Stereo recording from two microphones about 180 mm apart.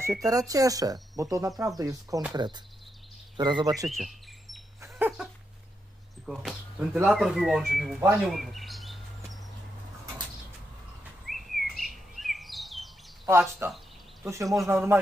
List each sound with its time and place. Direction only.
0.0 s speech: 15° right (ahead or behind)
3.8 s bird vocalization: centre (ahead or behind)
4.8 s dog: 10° right (ahead or behind)
6.2 s speech: centre (ahead or behind)
8.0 s bird vocalization: 5° right (ahead or behind)
11.2 s chirp: centre (ahead or behind)
13.3 s speech: 15° right (ahead or behind)